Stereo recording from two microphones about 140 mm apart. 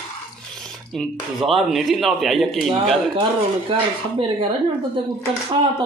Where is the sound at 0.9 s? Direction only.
Centre (ahead or behind).